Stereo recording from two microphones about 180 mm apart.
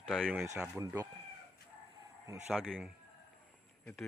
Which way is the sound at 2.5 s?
Centre (ahead or behind).